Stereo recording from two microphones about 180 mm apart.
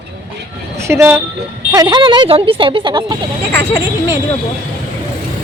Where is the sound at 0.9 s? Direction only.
15° right (ahead or behind).